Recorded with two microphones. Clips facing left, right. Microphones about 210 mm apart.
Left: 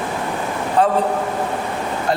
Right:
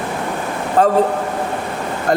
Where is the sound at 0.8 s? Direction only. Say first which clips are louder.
Right 3 dB; 45° right (ahead or behind).